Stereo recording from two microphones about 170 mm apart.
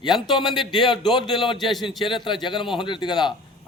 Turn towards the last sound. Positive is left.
turn(degrees=25)  # may be behind; listen again after turning